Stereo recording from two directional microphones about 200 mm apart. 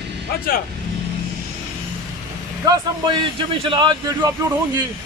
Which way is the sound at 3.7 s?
25° right (ahead or behind).